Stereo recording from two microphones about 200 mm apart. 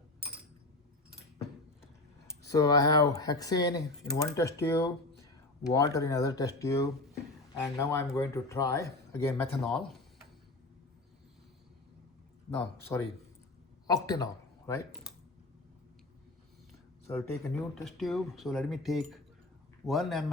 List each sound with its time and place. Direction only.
2.5 s speech: 15° left (ahead or behind)
9.6 s speech: centre (ahead or behind)
12.9 s speech: 10° left (ahead or behind)
17.1 s speech: 15° left (ahead or behind)
17.6 s speech: centre (ahead or behind)